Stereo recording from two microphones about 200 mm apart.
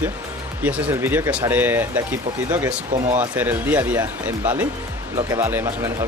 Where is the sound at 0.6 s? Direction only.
10° right (ahead or behind).